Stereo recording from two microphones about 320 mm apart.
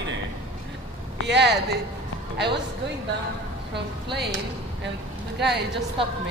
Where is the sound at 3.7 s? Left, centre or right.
Right.